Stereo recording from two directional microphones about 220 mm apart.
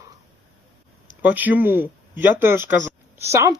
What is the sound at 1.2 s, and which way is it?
Speech, 5° right (ahead or behind).